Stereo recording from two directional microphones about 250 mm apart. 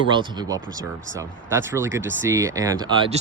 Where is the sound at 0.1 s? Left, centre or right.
Centre.